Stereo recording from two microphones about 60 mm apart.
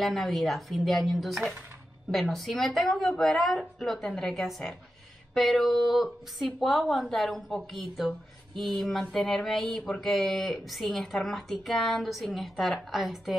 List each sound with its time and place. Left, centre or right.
0.0 s speech: centre